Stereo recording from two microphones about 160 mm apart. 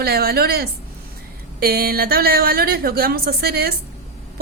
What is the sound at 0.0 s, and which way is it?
A woman's voice, 70° right (ahead or behind).